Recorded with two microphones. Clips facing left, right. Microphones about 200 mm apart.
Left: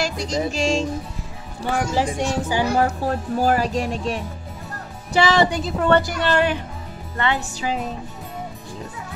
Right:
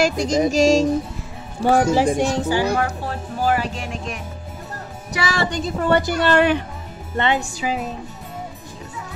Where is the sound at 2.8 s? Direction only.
40° left (ahead or behind).